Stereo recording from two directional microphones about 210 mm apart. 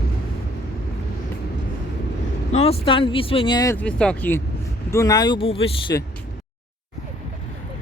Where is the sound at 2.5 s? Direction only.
30° left (ahead or behind).